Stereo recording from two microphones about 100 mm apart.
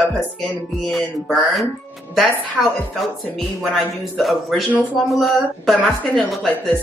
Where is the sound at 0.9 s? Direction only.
Centre (ahead or behind).